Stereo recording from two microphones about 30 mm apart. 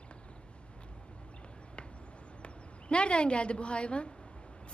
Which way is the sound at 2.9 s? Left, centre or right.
Left.